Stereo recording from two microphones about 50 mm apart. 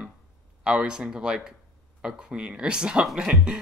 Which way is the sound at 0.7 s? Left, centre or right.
Centre.